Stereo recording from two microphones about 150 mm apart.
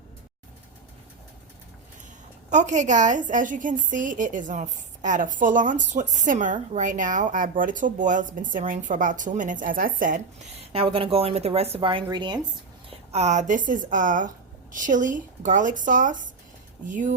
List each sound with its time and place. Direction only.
2.5 s a woman's voice: 55° right (ahead or behind)
10.6 s a woman's voice: 40° right (ahead or behind)
13.1 s a woman's voice: 50° right (ahead or behind)